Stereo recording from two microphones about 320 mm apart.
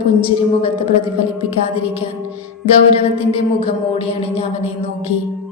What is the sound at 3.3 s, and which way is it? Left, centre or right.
A woman's voice, centre.